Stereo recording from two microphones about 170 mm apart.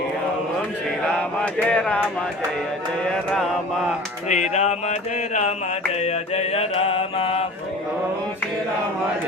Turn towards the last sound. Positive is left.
turn(degrees=35)  # may be behind; listen again after turning